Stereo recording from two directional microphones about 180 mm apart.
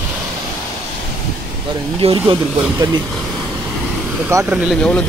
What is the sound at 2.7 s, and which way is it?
Speech, 25° right (ahead or behind).